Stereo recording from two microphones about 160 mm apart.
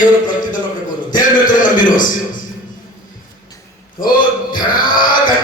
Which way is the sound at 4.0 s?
60° left (ahead or behind).